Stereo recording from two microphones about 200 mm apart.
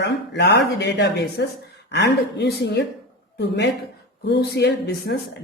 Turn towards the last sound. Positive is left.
turn(degrees=60)  # may be behind; listen again after turning